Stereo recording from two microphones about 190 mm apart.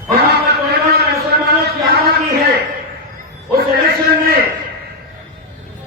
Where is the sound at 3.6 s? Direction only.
55° right (ahead or behind).